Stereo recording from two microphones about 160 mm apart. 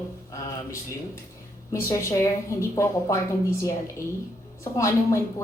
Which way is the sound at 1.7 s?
15° left (ahead or behind).